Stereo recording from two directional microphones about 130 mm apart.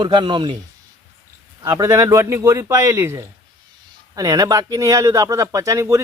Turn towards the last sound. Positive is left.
turn(degrees=-25)  # may be behind; listen again after turning